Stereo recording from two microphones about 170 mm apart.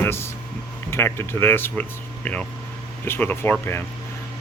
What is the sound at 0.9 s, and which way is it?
Speech, 15° left (ahead or behind).